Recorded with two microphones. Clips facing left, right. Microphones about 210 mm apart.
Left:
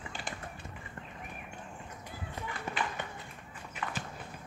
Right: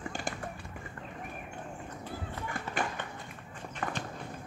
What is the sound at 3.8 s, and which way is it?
Clip-clop, 45° right (ahead or behind).